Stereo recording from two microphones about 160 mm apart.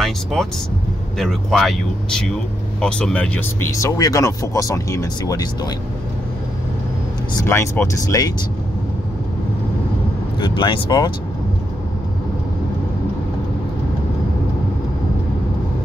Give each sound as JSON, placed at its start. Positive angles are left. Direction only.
{"t": 0.0, "sound": "speech", "side_deg": 5}
{"t": 7.4, "sound": "speech", "side_deg": 15}
{"t": 10.4, "sound": "speech", "side_deg": 30}